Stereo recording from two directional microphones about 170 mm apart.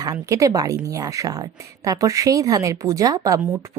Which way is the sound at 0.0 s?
20° right (ahead or behind).